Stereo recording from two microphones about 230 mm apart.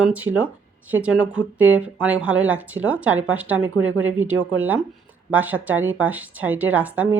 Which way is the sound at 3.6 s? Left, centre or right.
Right.